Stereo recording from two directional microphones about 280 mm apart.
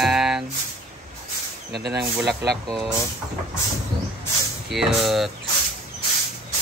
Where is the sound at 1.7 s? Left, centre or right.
Right.